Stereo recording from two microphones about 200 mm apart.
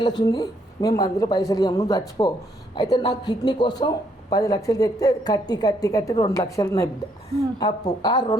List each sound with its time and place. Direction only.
0.0 s a woman's voice: 20° left (ahead or behind)